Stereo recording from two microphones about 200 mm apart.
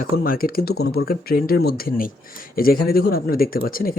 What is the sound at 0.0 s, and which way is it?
Speech, 45° left (ahead or behind).